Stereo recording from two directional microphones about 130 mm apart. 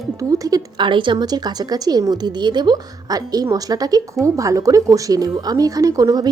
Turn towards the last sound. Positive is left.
turn(degrees=-25)  # may be behind; listen again after turning